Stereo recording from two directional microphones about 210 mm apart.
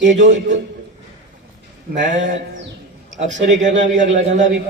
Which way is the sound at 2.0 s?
35° right (ahead or behind).